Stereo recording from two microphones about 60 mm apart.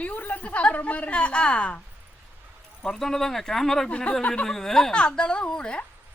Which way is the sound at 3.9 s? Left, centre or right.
Left.